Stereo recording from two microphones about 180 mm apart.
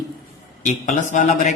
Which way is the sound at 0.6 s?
40° left (ahead or behind).